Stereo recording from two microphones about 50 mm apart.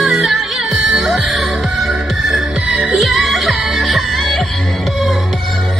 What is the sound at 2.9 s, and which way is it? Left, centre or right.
Music, centre.